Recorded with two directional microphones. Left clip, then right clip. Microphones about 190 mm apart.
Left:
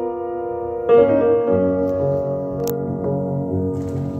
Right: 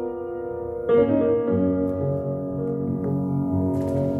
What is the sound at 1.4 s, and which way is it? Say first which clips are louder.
Music: left 6 dB; 30° right (ahead or behind).